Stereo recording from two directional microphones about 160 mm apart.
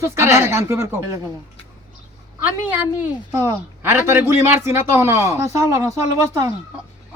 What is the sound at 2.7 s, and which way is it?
A man's voice, 15° right (ahead or behind).